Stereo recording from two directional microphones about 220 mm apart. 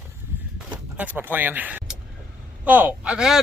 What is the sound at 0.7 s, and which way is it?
Speech, 5° right (ahead or behind).